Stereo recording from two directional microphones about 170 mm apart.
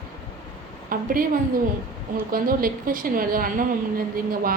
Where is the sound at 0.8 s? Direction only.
55° right (ahead or behind).